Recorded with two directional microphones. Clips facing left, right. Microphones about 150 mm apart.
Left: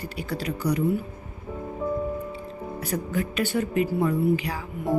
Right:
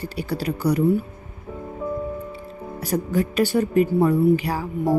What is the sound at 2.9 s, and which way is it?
A woman's voice, 40° right (ahead or behind).